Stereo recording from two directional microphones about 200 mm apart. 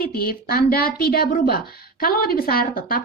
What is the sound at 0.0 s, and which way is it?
A woman's voice, 50° left (ahead or behind).